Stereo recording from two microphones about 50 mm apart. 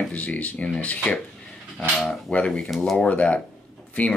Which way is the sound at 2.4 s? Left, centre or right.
Centre.